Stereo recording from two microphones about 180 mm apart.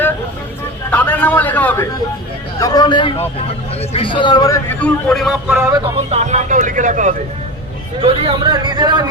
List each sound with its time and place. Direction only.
0.9 s a sound: 10° left (ahead or behind)
2.6 s a man's voice: 20° left (ahead or behind); by 5.3 s 5° left (ahead or behind)
5.5 s speech: 15° right (ahead or behind)
6.1 s speech: 40° right (ahead or behind)
8.0 s speech: 30° right (ahead or behind)